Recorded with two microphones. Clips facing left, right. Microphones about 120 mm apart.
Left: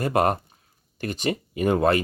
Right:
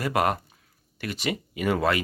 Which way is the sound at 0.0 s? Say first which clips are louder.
Left 3 dB; 40° left (ahead or behind).